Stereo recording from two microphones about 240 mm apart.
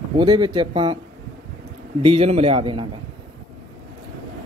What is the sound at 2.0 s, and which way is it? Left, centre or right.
Speech, right.